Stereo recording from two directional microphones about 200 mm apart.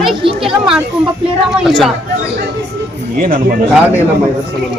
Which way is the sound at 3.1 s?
45° right (ahead or behind).